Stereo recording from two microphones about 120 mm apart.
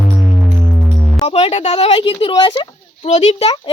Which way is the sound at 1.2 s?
60° left (ahead or behind).